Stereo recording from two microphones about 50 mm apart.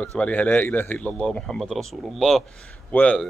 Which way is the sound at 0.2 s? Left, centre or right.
Left.